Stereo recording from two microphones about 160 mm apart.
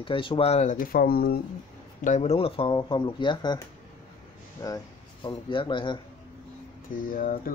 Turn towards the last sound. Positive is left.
turn(degrees=60)  # may be behind; listen again after turning